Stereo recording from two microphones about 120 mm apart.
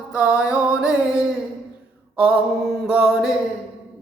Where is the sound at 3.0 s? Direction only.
5° right (ahead or behind).